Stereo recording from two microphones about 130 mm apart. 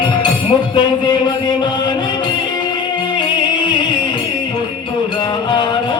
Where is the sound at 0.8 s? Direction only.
35° left (ahead or behind).